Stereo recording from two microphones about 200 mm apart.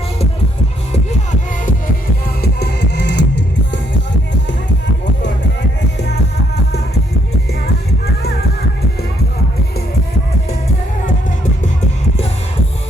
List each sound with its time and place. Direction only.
2.4 s music: 55° left (ahead or behind)